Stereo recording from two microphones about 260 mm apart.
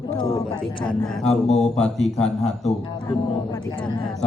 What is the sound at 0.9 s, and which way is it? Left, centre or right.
Speech, left.